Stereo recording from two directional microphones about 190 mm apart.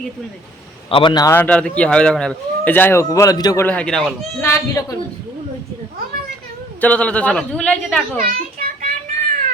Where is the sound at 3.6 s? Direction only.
5° left (ahead or behind).